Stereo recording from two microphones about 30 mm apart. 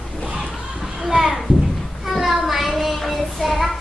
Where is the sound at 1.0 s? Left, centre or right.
Centre.